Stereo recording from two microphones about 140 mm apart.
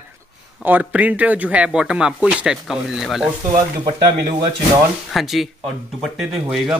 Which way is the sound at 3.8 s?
35° right (ahead or behind).